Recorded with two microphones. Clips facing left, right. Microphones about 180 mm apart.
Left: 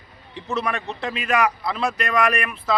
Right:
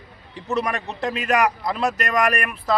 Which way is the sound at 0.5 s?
40° right (ahead or behind).